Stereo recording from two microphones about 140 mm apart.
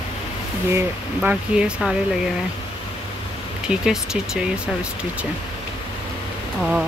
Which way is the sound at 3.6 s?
5° right (ahead or behind).